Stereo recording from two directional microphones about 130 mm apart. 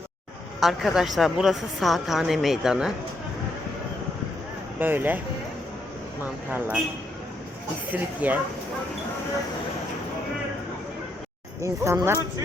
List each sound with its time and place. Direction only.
0.6 s a woman's voice: centre (ahead or behind)
4.8 s speech: 15° right (ahead or behind)
7.9 s speech: 10° right (ahead or behind)
11.6 s speech: 25° right (ahead or behind)